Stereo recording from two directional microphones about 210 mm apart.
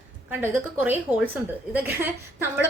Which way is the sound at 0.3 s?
10° right (ahead or behind).